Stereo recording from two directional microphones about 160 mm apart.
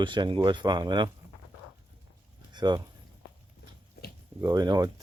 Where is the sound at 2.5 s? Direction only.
25° right (ahead or behind).